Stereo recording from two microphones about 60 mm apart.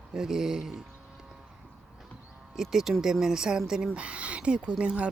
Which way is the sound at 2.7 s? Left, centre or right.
Centre.